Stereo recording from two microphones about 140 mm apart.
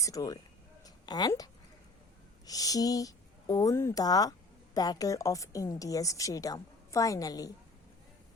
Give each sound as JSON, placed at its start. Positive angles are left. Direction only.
{"t": 0.0, "sound": "speech", "side_deg": 25}
{"t": 0.9, "sound": "a sound", "side_deg": 30}
{"t": 2.5, "sound": "speech", "side_deg": 25}